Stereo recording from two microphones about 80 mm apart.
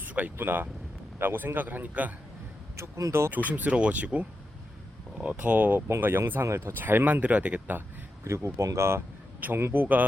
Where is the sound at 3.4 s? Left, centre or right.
Right.